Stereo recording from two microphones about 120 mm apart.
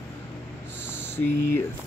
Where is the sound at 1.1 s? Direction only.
20° left (ahead or behind).